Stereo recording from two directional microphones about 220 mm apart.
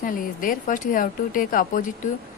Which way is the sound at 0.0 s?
40° left (ahead or behind).